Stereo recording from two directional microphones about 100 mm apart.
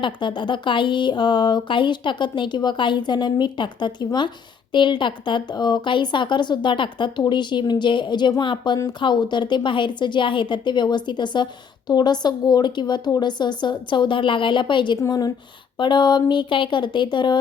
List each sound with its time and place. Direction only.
0.0 s speech: 55° left (ahead or behind)
15.0 s a woman's voice: 40° left (ahead or behind)